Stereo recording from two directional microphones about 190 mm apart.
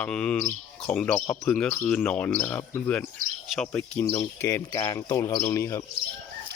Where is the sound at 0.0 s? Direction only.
5° left (ahead or behind).